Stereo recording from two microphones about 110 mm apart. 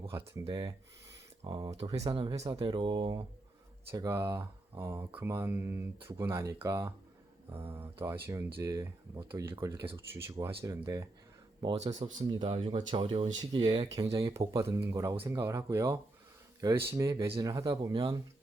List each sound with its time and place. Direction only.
0.3 s speech: 35° right (ahead or behind)
4.1 s speech: 25° right (ahead or behind)
12.2 s speech: 50° right (ahead or behind)
13.4 s speech: 40° right (ahead or behind)